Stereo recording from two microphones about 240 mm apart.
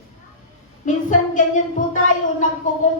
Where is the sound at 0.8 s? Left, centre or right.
Left.